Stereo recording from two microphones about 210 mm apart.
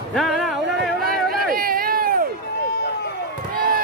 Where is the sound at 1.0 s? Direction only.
45° right (ahead or behind).